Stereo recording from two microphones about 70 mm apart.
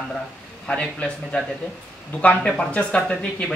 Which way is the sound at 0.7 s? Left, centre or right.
Centre.